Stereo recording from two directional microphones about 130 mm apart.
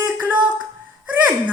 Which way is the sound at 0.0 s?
10° right (ahead or behind).